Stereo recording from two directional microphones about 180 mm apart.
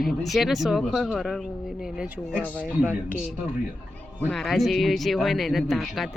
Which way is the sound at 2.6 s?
10° right (ahead or behind).